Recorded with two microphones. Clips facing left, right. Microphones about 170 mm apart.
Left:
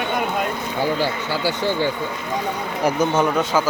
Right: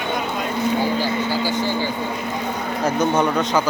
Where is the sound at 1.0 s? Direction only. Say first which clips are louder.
Right 1 dB; 65° left (ahead or behind).